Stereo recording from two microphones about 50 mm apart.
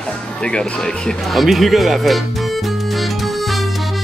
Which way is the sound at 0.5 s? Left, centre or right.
Centre.